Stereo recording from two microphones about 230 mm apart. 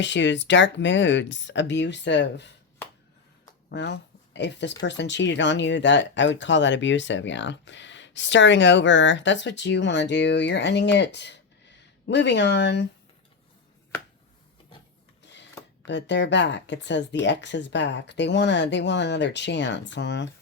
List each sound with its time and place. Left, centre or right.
0.0 s speech: left
3.7 s speech: left
15.2 s a sound: left
15.9 s speech: left